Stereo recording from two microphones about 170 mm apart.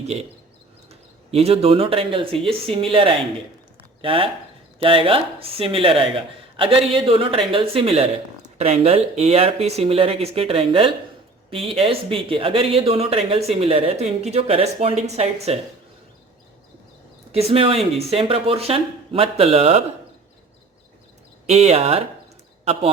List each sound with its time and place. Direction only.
1.3 s speech: 35° right (ahead or behind)
17.3 s speech: 35° right (ahead or behind)
21.4 s speech: 40° right (ahead or behind)